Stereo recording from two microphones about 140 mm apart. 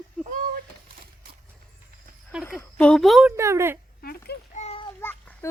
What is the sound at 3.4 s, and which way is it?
Speech, 20° right (ahead or behind).